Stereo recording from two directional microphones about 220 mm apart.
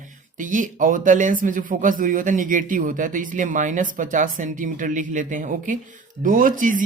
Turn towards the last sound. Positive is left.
turn(degrees=-35)  # may be behind; listen again after turning